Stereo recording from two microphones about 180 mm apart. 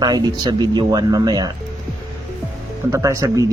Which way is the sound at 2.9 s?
15° right (ahead or behind).